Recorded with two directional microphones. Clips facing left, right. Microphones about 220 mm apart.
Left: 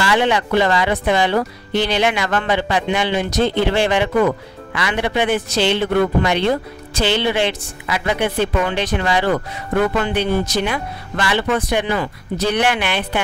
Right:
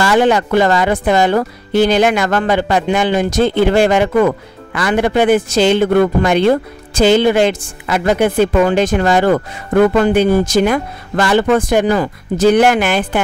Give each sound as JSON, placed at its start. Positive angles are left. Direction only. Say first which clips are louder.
{"t": 0.0, "sound": "a man's voice", "louder": "right 5 dB", "side_deg": -45}